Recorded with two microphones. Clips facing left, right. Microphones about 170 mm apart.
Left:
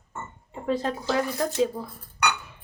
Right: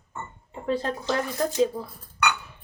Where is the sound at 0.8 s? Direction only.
5° left (ahead or behind).